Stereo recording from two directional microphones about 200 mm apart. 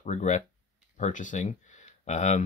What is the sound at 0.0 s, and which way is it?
Speech, 35° left (ahead or behind).